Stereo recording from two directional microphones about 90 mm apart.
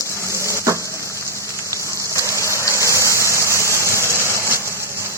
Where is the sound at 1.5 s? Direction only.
35° right (ahead or behind).